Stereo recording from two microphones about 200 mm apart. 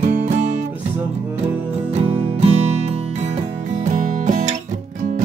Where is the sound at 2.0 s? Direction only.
30° right (ahead or behind).